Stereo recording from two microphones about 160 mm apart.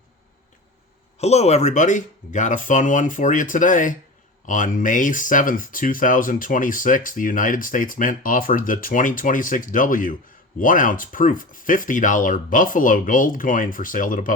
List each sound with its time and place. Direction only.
1.2 s speech: 40° left (ahead or behind)